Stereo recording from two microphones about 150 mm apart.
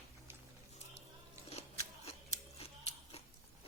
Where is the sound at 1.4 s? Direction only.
45° left (ahead or behind).